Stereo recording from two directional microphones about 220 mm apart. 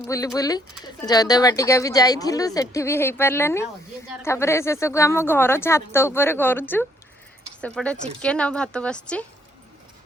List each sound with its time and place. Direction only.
0.3 s a woman's voice: 15° left (ahead or behind)